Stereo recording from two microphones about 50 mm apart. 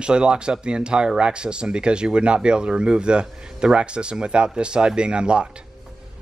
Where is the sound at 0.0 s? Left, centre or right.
Centre.